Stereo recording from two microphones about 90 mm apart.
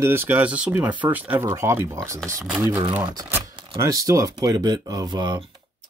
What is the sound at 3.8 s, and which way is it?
Speech, 40° right (ahead or behind).